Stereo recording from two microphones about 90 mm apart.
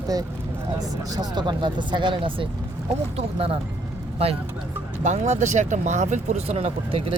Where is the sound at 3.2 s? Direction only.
90° right.